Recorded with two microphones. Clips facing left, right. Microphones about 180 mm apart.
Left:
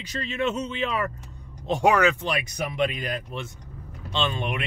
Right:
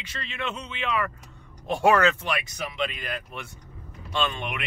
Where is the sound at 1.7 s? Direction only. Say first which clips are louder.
Even; 15° left (ahead or behind).